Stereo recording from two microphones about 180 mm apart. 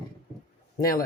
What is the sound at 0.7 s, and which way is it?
Speech, 50° left (ahead or behind).